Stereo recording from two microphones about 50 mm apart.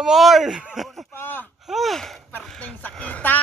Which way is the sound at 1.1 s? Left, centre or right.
Left.